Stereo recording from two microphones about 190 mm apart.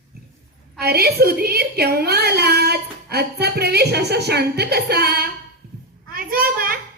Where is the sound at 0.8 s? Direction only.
55° right (ahead or behind).